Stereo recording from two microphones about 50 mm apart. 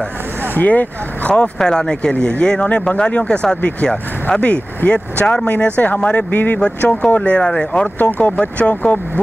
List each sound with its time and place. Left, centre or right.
0.6 s speech: left
1.3 s speech: centre; by 6.6 s left
7.2 s speech: centre